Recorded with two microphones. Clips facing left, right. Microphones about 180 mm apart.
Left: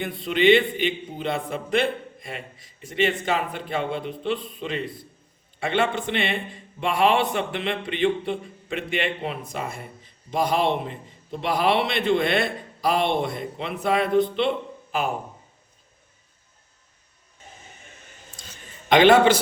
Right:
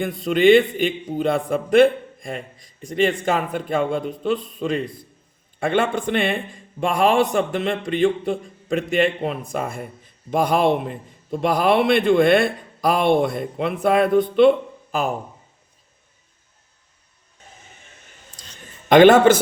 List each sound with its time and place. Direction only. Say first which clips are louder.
0.0 s a man's voice: right 4 dB; 45° right (ahead or behind)
18.9 s a man's voice: right 4 dB; 50° right (ahead or behind)